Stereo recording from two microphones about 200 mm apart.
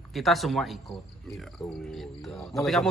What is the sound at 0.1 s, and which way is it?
A man's voice, centre (ahead or behind).